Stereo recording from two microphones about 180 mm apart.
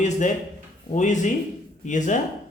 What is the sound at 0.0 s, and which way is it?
A man's voice, 40° left (ahead or behind).